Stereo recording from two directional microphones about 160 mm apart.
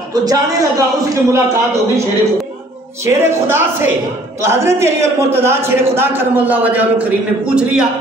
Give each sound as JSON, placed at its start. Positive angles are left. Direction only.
{"t": 0.1, "sound": "a man's voice", "side_deg": -25}
{"t": 3.1, "sound": "a man's voice", "side_deg": -15}